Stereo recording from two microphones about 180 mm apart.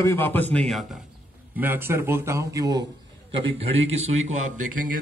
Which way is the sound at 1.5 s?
10° right (ahead or behind).